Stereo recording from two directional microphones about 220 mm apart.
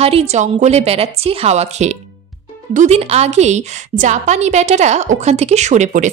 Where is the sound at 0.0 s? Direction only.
30° right (ahead or behind).